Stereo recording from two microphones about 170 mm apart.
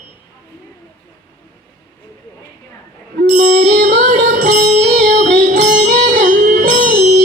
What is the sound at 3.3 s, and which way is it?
Music, 50° right (ahead or behind).